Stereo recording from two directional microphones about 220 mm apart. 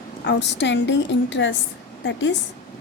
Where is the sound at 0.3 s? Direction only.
55° left (ahead or behind).